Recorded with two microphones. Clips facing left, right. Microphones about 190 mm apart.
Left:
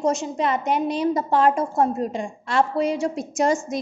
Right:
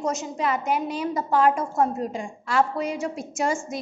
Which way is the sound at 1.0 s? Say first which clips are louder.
Left 1 dB; 35° left (ahead or behind).